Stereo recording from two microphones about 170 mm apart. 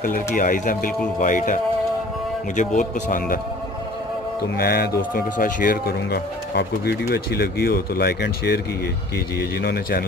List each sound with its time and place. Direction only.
0.0 s speech: 55° left (ahead or behind)
4.4 s speech: 65° left (ahead or behind)
9.6 s speech: 65° left (ahead or behind)